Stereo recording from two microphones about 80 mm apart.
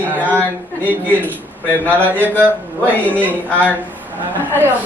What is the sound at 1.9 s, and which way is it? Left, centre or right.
Speech, right.